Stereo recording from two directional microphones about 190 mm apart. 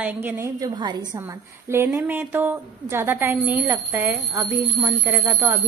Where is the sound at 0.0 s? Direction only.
10° right (ahead or behind).